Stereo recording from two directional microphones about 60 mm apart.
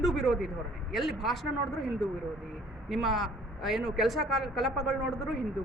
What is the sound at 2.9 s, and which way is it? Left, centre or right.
A woman's voice, centre.